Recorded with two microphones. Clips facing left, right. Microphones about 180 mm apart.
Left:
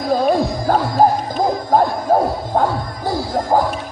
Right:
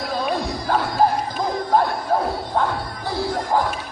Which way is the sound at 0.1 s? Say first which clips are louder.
Left 9 dB; 45° left (ahead or behind).